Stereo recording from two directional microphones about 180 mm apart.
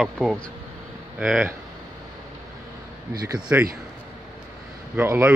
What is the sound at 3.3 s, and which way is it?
Speech, 5° right (ahead or behind).